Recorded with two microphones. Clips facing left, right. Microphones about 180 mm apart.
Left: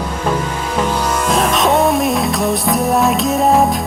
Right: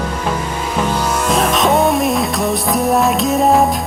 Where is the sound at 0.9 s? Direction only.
5° right (ahead or behind).